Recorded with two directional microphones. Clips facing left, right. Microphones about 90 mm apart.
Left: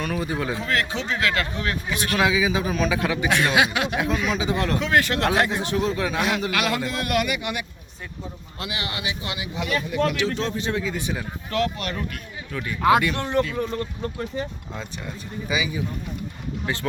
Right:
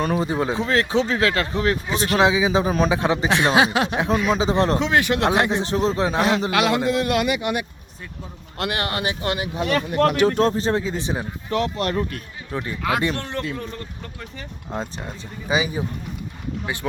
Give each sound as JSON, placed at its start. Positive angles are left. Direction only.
{"t": 0.0, "sound": "speech", "side_deg": -30}
{"t": 8.5, "sound": "speech", "side_deg": -60}
{"t": 9.6, "sound": "speech", "side_deg": -60}
{"t": 10.5, "sound": "speech", "side_deg": -35}
{"t": 13.1, "sound": "a man's voice", "side_deg": 20}
{"t": 13.6, "sound": "speech", "side_deg": 35}
{"t": 15.4, "sound": "speech", "side_deg": -35}
{"t": 16.7, "sound": "speech", "side_deg": -15}